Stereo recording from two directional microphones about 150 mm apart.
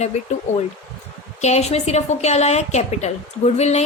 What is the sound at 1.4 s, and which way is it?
A woman's voice, 50° left (ahead or behind).